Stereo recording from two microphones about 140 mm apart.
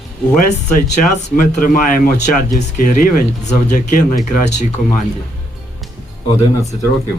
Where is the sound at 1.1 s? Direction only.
80° left.